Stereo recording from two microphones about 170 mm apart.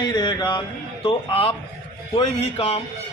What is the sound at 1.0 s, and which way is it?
A man's voice, 35° left (ahead or behind).